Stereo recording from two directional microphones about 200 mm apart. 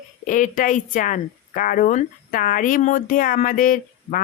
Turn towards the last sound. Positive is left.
turn(degrees=45)  # may be behind; listen again after turning